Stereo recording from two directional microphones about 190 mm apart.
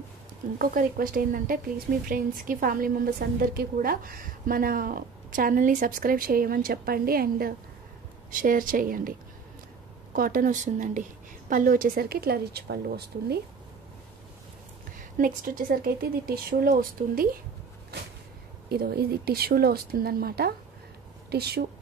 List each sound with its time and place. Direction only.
0.6 s a woman's voice: 50° right (ahead or behind)
10.1 s a woman's voice: 50° right (ahead or behind)
15.0 s a woman's voice: 45° right (ahead or behind)
18.7 s speech: 55° right (ahead or behind)